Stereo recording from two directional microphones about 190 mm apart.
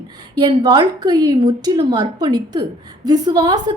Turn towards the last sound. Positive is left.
turn(degrees=-20)  # may be behind; listen again after turning